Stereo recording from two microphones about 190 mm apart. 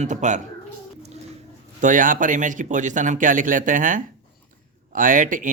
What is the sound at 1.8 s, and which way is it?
Speech, 45° right (ahead or behind).